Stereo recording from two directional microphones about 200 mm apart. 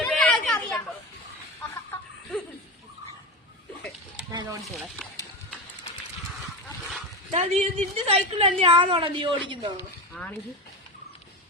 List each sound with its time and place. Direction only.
0.0 s chatter: centre (ahead or behind)
4.3 s speech: 15° right (ahead or behind)
4.6 s speech: centre (ahead or behind)
7.3 s a woman's voice: 30° right (ahead or behind)
10.1 s speech: 5° left (ahead or behind)